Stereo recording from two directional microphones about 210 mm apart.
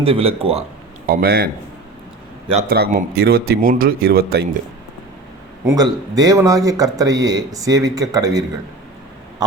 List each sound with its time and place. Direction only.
0.0 s speech: 25° right (ahead or behind)
1.0 s speech: 45° right (ahead or behind)
2.6 s speech: 45° right (ahead or behind)
5.6 s speech: 15° right (ahead or behind)